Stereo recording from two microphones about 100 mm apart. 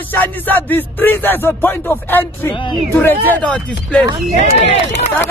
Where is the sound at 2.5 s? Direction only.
55° left (ahead or behind).